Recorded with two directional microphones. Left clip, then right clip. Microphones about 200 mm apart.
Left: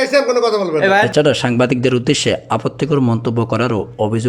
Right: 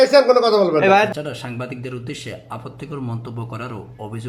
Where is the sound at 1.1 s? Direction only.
45° left (ahead or behind).